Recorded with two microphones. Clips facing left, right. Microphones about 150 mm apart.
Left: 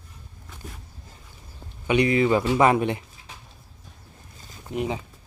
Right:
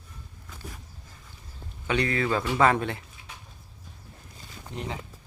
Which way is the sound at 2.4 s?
25° left (ahead or behind).